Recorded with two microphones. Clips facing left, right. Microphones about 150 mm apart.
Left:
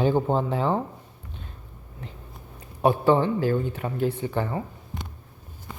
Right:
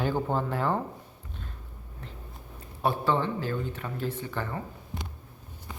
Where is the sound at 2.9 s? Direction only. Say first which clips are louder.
Left 7 dB; 40° left (ahead or behind).